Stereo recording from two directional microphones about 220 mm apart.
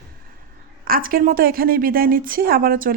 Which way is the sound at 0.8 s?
40° right (ahead or behind).